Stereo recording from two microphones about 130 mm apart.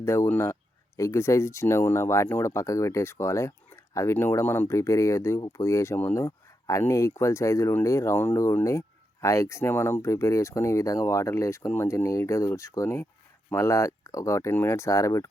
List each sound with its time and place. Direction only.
0.0 s speech: 20° left (ahead or behind)